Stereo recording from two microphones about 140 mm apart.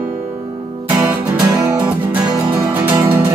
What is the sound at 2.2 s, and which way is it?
Music, 30° right (ahead or behind).